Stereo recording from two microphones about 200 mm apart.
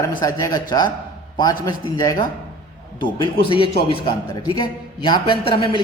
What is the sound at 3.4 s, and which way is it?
A man's voice, 25° left (ahead or behind).